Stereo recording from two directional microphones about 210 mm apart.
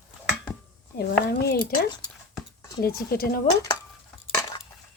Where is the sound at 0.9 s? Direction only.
50° left (ahead or behind).